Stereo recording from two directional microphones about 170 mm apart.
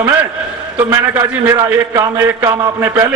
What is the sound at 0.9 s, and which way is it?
A man's voice, 15° right (ahead or behind).